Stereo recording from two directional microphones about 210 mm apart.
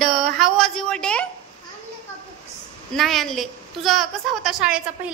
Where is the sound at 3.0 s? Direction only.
Centre (ahead or behind).